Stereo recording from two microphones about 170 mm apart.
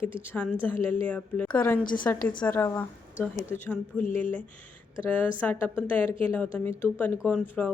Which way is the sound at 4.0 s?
50° left (ahead or behind).